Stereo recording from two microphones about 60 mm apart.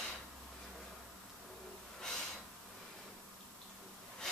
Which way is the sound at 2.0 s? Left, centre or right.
Centre.